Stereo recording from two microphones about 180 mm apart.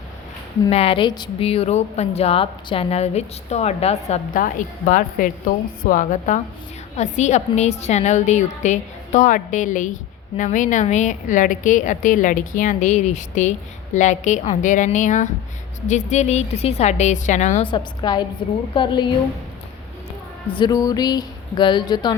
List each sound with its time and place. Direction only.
0.7 s a woman's voice: 35° left (ahead or behind)
17.7 s speech: 25° left (ahead or behind)
20.5 s speech: 25° left (ahead or behind)